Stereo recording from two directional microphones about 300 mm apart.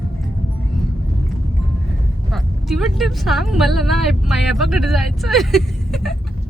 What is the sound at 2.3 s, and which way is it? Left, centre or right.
Speech, centre.